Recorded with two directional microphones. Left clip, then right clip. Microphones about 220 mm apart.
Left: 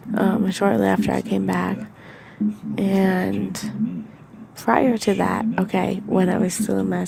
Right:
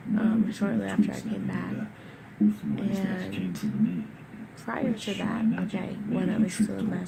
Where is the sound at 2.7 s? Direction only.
40° left (ahead or behind).